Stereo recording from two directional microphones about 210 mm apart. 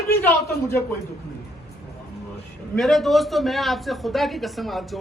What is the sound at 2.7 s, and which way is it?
A man's voice, centre (ahead or behind).